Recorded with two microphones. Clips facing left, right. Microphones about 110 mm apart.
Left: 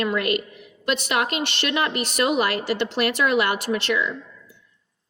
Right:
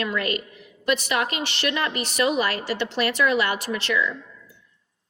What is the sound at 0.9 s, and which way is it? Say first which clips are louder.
Speech: left 3 dB; 60° left (ahead or behind).